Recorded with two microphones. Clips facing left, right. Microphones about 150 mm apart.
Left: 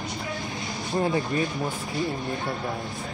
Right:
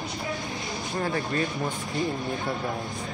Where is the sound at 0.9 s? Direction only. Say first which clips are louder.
Left 4 dB; 20° left (ahead or behind).